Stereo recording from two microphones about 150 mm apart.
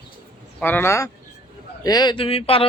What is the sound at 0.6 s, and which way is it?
Speech, 15° left (ahead or behind).